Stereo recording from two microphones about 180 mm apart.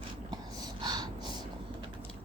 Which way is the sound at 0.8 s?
25° right (ahead or behind).